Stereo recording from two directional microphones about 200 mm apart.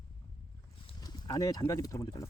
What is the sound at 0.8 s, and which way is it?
Speech, 20° left (ahead or behind).